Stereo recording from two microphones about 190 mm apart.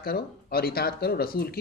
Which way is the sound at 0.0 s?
55° left (ahead or behind).